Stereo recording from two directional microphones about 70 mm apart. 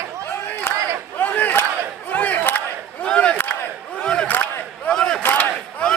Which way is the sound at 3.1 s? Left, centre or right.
Centre.